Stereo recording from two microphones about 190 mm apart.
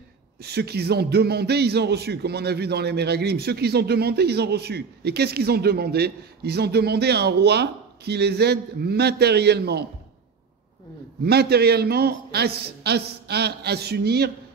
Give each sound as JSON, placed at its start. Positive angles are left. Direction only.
{"t": 0.4, "sound": "a man's voice", "side_deg": -60}
{"t": 11.2, "sound": "a man's voice", "side_deg": -60}